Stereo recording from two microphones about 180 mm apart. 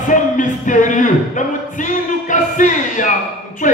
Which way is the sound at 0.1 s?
45° left (ahead or behind).